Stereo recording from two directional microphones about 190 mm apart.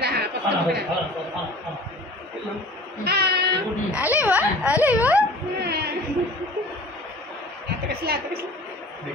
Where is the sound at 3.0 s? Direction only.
60° right (ahead or behind).